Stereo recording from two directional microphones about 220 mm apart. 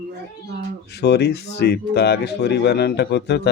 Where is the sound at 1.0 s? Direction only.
50° left (ahead or behind).